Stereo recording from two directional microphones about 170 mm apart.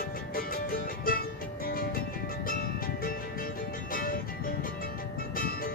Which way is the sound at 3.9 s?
55° left (ahead or behind).